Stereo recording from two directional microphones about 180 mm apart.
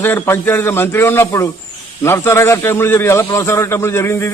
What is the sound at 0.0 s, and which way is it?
A man's voice, 10° left (ahead or behind).